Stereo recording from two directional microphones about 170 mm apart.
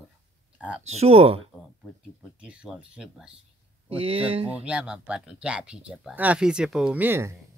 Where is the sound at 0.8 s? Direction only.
40° right (ahead or behind).